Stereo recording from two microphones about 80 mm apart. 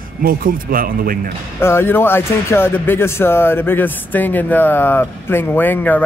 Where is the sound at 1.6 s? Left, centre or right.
Left.